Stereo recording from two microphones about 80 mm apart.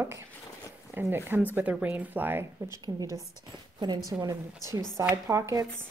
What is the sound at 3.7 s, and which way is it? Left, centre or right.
Speech, right.